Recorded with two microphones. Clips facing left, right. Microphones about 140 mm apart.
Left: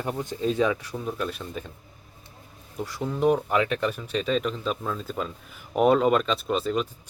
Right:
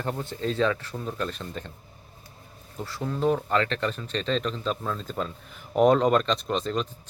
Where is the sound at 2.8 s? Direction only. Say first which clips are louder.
Left 2 dB; 15° left (ahead or behind).